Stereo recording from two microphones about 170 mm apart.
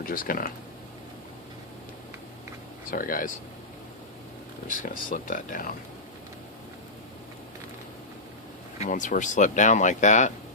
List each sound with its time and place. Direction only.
0.0 s speech: 55° left (ahead or behind)
2.9 s speech: 55° left (ahead or behind)
4.7 s speech: 50° left (ahead or behind)
8.8 s speech: 45° left (ahead or behind)